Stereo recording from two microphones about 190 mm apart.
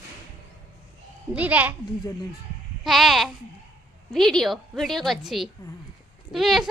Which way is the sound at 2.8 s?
Centre (ahead or behind).